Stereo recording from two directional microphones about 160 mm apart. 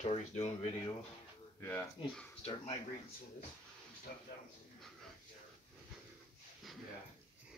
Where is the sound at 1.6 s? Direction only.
15° left (ahead or behind).